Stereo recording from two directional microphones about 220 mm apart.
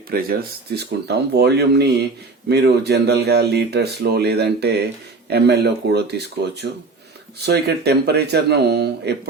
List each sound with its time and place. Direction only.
0.1 s speech: 45° right (ahead or behind)